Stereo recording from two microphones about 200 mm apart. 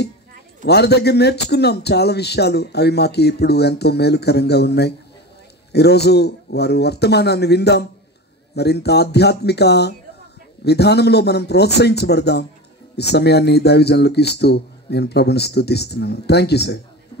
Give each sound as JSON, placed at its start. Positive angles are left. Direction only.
{"t": 0.7, "sound": "speech", "side_deg": 55}